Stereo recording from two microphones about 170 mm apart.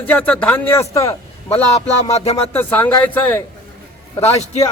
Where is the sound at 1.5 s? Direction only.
40° left (ahead or behind).